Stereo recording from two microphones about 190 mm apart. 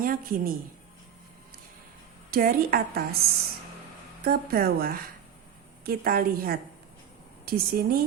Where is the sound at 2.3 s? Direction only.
50° right (ahead or behind).